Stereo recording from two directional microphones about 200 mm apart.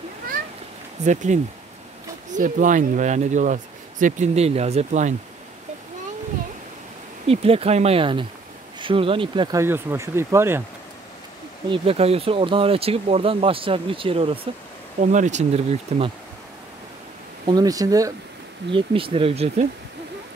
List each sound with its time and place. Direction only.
1.0 s speech: 35° right (ahead or behind)
7.2 s speech: 30° right (ahead or behind)
9.6 s speech: 15° right (ahead or behind)
11.7 s speech: 30° right (ahead or behind)
17.5 s speech: 20° right (ahead or behind)